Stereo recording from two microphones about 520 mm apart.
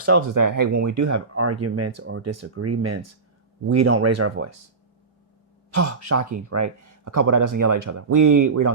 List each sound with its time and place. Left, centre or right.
0.0 s speech: right
5.7 s speech: right